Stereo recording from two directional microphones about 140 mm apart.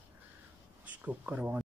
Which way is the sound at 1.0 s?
10° right (ahead or behind).